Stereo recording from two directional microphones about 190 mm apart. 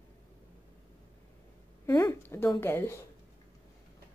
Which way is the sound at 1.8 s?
15° left (ahead or behind).